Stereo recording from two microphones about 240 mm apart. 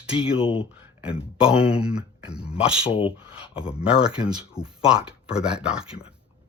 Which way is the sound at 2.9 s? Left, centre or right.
Left.